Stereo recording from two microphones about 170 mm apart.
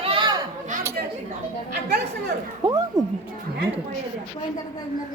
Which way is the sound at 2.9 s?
20° right (ahead or behind).